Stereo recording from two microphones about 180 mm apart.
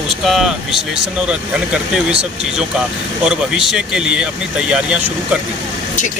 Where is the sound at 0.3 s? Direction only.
Centre (ahead or behind).